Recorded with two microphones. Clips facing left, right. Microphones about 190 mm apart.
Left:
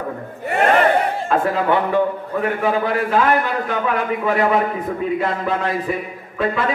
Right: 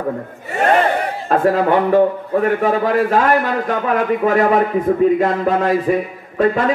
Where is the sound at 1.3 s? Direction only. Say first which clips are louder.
Right 5 dB; 40° right (ahead or behind).